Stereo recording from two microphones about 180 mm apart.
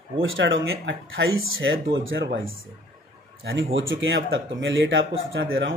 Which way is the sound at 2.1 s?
65° right (ahead or behind).